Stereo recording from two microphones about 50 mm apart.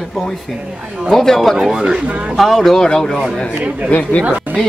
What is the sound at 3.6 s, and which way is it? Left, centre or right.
Speech, right.